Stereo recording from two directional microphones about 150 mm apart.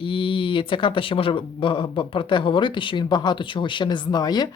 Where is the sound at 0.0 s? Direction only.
35° left (ahead or behind).